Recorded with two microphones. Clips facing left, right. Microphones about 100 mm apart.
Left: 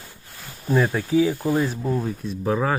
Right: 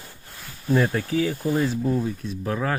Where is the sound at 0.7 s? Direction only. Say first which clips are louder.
Left 2 dB; 10° left (ahead or behind).